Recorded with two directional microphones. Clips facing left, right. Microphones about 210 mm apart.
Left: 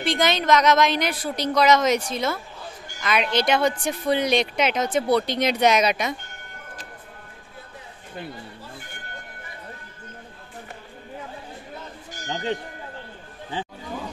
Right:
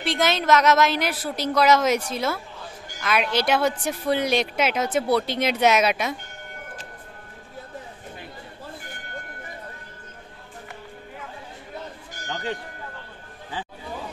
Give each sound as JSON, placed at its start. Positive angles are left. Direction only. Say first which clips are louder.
{"t": 0.0, "sound": "speech", "louder": "left 1 dB", "side_deg": -5}
{"t": 12.3, "sound": "speech", "louder": "left 3 dB", "side_deg": 25}